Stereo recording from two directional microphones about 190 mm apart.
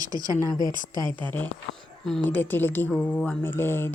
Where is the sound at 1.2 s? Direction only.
10° left (ahead or behind).